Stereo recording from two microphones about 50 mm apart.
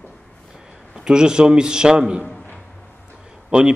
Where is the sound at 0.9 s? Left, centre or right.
Centre.